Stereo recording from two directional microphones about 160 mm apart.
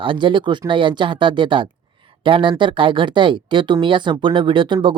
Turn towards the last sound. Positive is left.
turn(degrees=-30)  # may be behind; listen again after turning